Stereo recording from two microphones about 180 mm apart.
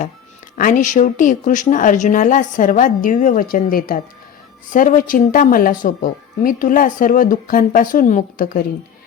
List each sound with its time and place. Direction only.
0.5 s speech: 45° left (ahead or behind)